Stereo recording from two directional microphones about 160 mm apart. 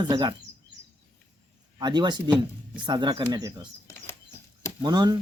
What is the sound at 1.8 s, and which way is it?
Speech, 25° right (ahead or behind).